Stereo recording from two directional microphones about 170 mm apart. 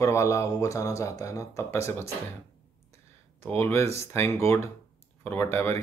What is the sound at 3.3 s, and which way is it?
Speech, 15° left (ahead or behind).